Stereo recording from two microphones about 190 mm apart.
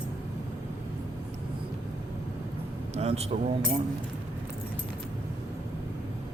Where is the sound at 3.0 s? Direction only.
35° right (ahead or behind).